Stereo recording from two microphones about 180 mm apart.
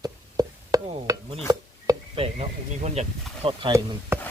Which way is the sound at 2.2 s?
35° right (ahead or behind).